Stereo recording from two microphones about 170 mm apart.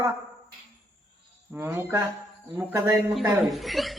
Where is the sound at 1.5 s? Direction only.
15° right (ahead or behind).